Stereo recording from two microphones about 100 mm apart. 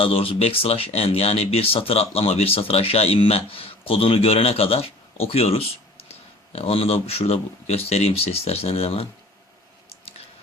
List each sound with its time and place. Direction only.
0.0 s speech: 70° left (ahead or behind); by 9.0 s 85° left